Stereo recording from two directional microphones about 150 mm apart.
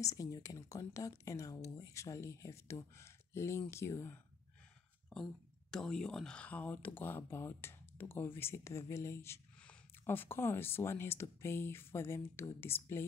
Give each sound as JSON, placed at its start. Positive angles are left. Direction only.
{"t": 0.0, "sound": "speech", "side_deg": 20}
{"t": 5.1, "sound": "speech", "side_deg": 5}